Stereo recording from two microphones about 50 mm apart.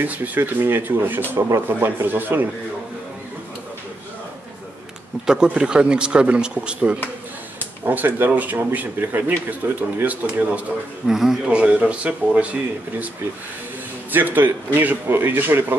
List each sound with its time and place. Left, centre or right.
0.0 s a man's voice: right
0.4 s a man's voice: right
5.2 s speech: centre
7.8 s a man's voice: right
11.1 s a man's voice: centre
11.4 s speech: right
14.1 s a man's voice: right